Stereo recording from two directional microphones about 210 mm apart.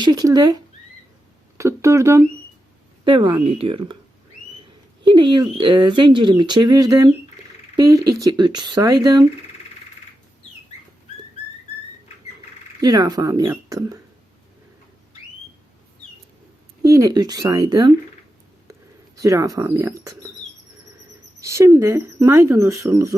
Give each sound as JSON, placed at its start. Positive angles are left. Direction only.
{"t": 0.0, "sound": "speech", "side_deg": -20}
{"t": 5.0, "sound": "speech", "side_deg": -20}
{"t": 8.2, "sound": "speech", "side_deg": -20}
{"t": 12.8, "sound": "speech", "side_deg": -20}
{"t": 16.8, "sound": "speech", "side_deg": -15}
{"t": 19.2, "sound": "speech", "side_deg": -15}
{"t": 21.4, "sound": "speech", "side_deg": -15}